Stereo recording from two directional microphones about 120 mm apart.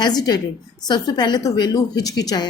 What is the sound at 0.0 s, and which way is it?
A woman's voice, 35° left (ahead or behind).